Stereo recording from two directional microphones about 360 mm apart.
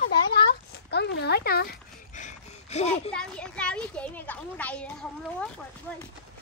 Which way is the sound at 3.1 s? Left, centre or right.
Centre.